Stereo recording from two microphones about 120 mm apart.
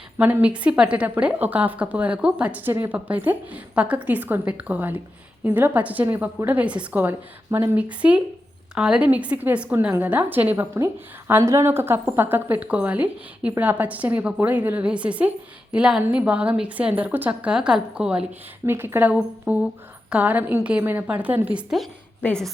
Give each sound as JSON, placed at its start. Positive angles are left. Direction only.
{"t": 0.2, "sound": "a woman's voice", "side_deg": -15}
{"t": 18.6, "sound": "a woman's voice", "side_deg": -20}
{"t": 22.2, "sound": "a woman's voice", "side_deg": 5}